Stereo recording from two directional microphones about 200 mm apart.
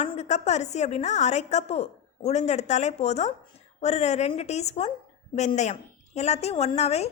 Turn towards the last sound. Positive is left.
turn(degrees=30)  # may be behind; listen again after turning